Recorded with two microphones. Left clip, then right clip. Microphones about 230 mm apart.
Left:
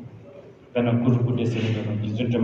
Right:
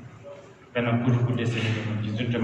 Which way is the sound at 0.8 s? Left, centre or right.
Right.